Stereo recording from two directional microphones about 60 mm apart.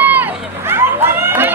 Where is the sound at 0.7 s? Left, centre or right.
Right.